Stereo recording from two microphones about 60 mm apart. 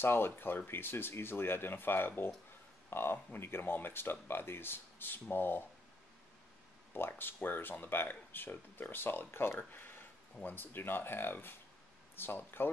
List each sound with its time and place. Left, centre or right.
0.0 s speech: left
6.9 s speech: left